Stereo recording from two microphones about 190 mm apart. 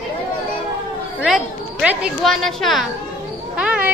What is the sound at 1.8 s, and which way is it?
A woman's voice, centre (ahead or behind).